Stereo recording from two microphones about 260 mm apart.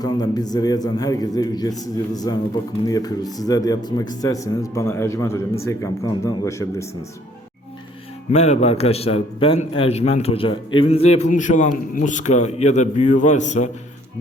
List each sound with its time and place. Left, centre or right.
0.0 s a man's voice: centre
8.3 s a man's voice: left